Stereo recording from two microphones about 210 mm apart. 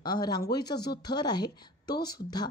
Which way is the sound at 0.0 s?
20° left (ahead or behind).